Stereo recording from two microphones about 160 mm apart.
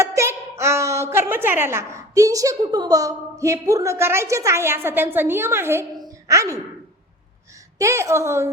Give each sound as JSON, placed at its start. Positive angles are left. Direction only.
{"t": 0.0, "sound": "a woman's voice", "side_deg": -15}
{"t": 7.8, "sound": "a woman's voice", "side_deg": -20}